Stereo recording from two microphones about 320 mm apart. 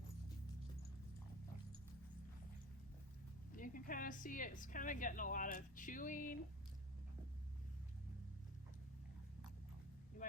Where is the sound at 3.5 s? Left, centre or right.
Left.